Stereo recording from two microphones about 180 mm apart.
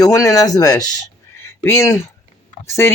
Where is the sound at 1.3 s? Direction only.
15° left (ahead or behind).